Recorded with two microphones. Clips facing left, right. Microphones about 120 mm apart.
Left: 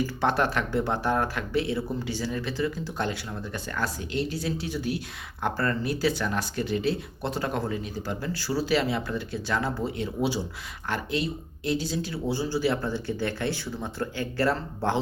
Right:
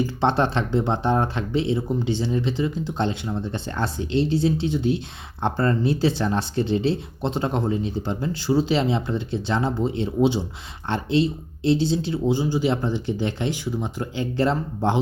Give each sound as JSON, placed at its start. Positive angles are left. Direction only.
{"t": 0.0, "sound": "speech", "side_deg": -25}